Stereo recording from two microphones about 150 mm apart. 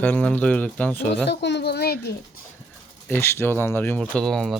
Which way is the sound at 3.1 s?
15° left (ahead or behind).